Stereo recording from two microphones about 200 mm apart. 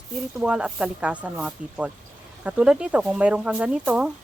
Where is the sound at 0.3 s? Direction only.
5° right (ahead or behind).